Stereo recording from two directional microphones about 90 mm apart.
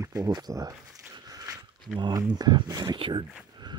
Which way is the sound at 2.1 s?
50° right (ahead or behind).